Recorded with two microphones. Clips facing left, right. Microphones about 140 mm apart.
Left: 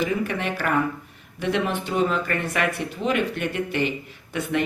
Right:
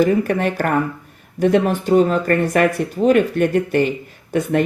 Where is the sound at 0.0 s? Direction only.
45° right (ahead or behind).